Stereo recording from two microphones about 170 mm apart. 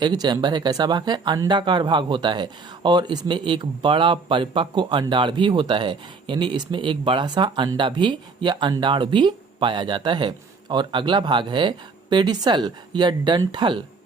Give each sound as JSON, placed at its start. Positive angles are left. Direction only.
{"t": 0.0, "sound": "speech", "side_deg": -25}